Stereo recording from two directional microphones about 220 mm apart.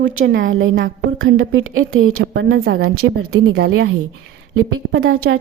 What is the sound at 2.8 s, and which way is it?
Speech, 80° right.